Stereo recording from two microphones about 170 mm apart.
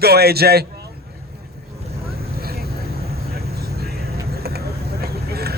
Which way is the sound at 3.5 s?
70° right (ahead or behind).